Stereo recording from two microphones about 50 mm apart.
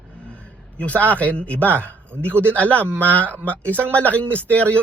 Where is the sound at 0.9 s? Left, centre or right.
Right.